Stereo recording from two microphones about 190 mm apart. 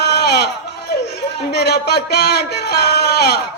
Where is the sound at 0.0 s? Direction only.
60° left (ahead or behind).